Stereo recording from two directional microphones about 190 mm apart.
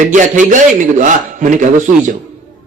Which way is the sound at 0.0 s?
40° right (ahead or behind).